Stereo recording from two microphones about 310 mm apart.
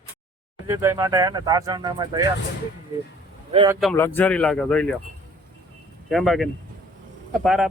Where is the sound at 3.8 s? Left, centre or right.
Centre.